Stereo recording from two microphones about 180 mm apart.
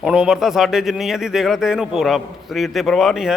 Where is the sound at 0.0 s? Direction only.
5° right (ahead or behind).